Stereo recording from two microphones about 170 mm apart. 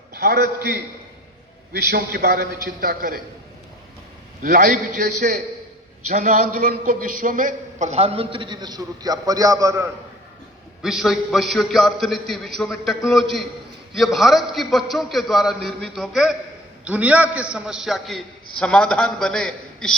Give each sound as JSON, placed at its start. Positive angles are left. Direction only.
{"t": 0.1, "sound": "a man's voice", "side_deg": -65}
{"t": 2.8, "sound": "a man's voice", "side_deg": -55}
{"t": 4.4, "sound": "a man's voice", "side_deg": -50}
{"t": 10.8, "sound": "a man's voice", "side_deg": 0}